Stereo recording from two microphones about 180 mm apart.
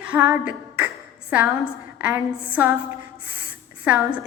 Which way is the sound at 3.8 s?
10° right (ahead or behind).